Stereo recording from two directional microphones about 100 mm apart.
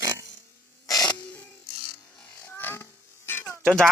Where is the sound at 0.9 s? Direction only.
40° left (ahead or behind).